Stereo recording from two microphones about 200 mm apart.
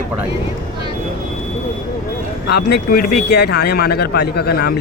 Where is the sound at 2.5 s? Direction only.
55° left (ahead or behind).